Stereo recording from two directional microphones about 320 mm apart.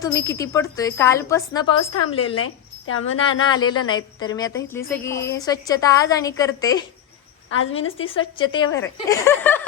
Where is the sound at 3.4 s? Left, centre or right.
Centre.